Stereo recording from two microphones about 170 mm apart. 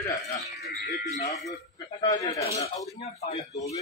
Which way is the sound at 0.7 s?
65° left (ahead or behind).